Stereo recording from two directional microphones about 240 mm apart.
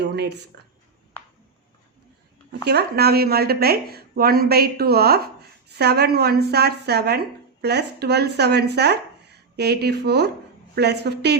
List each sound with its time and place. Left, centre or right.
0.0 s speech: right
2.6 s speech: right